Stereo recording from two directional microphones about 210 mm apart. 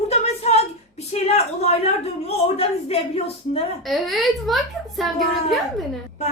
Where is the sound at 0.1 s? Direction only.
30° left (ahead or behind).